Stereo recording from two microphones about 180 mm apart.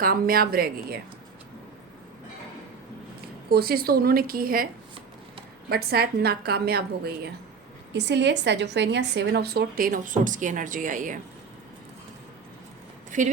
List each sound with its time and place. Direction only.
0.0 s a woman's voice: 55° right (ahead or behind)
3.5 s a woman's voice: 55° right (ahead or behind)
7.9 s a woman's voice: 70° right (ahead or behind); by 11.2 s 45° right (ahead or behind)
13.1 s speech: 45° right (ahead or behind)